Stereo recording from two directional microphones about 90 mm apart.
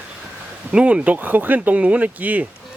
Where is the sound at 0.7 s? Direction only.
15° right (ahead or behind).